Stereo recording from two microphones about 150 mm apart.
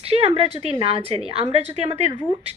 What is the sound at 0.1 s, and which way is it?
A woman's voice, 40° right (ahead or behind).